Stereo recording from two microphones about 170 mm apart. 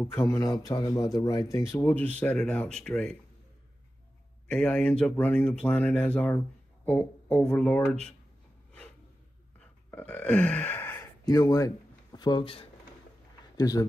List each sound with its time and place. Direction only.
0.0 s speech: 15° left (ahead or behind)
4.5 s speech: 5° left (ahead or behind)
9.6 s burping: 10° left (ahead or behind)
11.2 s speech: 20° left (ahead or behind)